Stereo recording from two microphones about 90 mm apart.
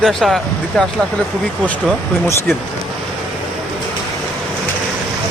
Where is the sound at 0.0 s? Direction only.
Centre (ahead or behind).